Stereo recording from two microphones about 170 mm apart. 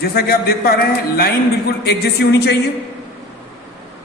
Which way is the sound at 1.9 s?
75° left (ahead or behind).